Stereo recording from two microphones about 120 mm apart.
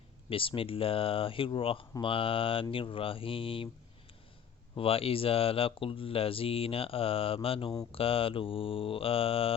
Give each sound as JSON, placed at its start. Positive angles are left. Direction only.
{"t": 0.3, "sound": "speech", "side_deg": 50}
{"t": 4.8, "sound": "speech", "side_deg": 50}